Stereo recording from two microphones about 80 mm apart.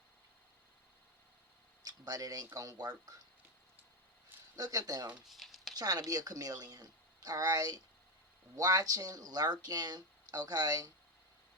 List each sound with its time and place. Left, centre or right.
1.8 s speech: right
4.5 s speech: right
5.2 s a sound: centre
5.7 s speech: right